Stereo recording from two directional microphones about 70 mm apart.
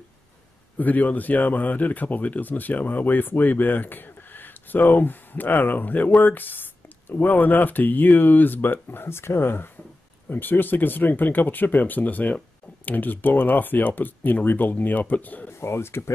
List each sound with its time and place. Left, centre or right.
0.7 s speech: left
15.6 s speech: left